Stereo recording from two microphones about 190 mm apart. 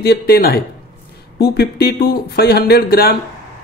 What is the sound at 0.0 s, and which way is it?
Speech, 55° left (ahead or behind).